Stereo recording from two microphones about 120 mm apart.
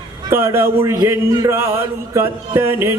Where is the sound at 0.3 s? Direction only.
20° right (ahead or behind).